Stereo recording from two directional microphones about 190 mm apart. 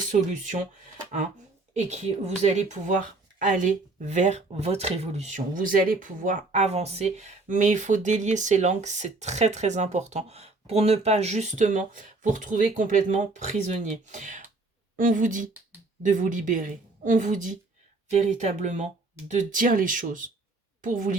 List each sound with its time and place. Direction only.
0.1 s speech: 40° right (ahead or behind)
1.7 s a woman's voice: 35° right (ahead or behind)